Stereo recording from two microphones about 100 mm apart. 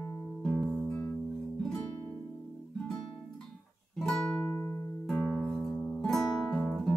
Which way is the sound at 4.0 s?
5° left (ahead or behind).